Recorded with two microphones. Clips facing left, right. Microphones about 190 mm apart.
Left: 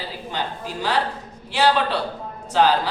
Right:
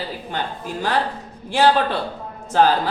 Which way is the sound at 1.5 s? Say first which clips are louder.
Right 3 dB; 50° right (ahead or behind).